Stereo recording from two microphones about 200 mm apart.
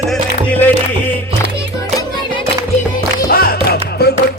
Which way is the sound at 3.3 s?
50° left (ahead or behind).